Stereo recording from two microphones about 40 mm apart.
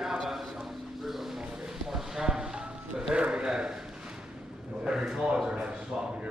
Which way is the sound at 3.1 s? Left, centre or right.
Right.